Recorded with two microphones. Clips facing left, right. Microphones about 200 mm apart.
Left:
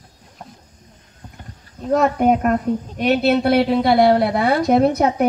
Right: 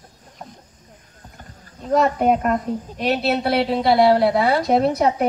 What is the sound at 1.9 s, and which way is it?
A woman's voice, 50° left (ahead or behind).